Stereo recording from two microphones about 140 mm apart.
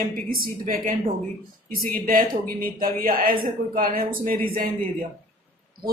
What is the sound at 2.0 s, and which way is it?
Speech, 90° right.